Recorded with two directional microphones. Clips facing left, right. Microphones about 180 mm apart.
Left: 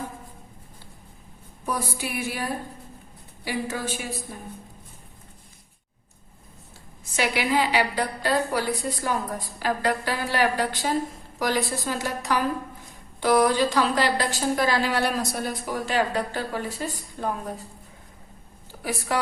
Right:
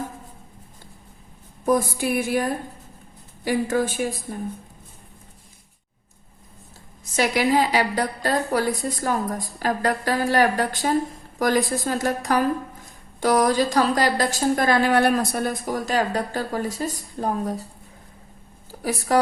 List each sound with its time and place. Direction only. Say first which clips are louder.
1.6 s a woman's voice: right 9 dB; 45° right (ahead or behind)
3.4 s a woman's voice: right 7 dB; 50° right (ahead or behind)
7.0 s a woman's voice: right 5 dB; 40° right (ahead or behind)
18.7 s a woman's voice: right 6 dB; 40° right (ahead or behind)